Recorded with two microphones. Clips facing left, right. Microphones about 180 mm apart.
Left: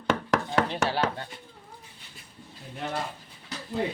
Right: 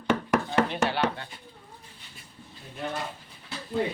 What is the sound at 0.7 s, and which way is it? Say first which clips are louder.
Speech: right 1 dB; 35° left (ahead or behind).